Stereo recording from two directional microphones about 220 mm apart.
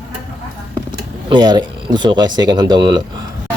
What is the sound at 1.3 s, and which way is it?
Speech, 20° right (ahead or behind).